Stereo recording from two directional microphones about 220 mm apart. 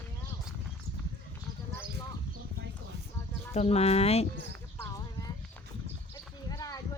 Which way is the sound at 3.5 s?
30° left (ahead or behind).